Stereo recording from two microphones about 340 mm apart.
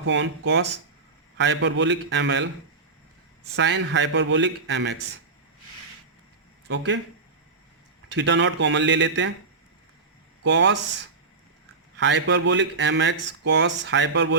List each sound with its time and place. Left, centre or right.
0.0 s a man's voice: right
3.5 s a man's voice: right
6.7 s a man's voice: right
8.1 s a man's voice: right
10.4 s a man's voice: right
11.9 s a man's voice: right